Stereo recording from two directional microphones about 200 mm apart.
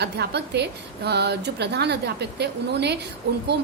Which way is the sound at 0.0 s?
55° right (ahead or behind).